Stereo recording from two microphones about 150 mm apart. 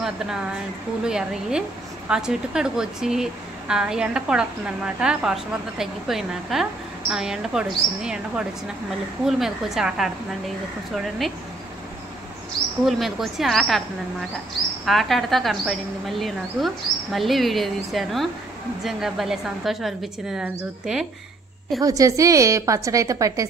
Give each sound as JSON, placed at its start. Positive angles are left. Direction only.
{"t": 1.0, "sound": "speech", "side_deg": -5}
{"t": 12.8, "sound": "speech", "side_deg": 0}
{"t": 14.9, "sound": "speech", "side_deg": 0}
{"t": 21.8, "sound": "a woman's voice", "side_deg": -20}